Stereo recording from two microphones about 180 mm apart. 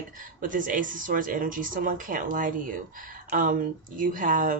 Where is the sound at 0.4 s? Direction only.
50° right (ahead or behind).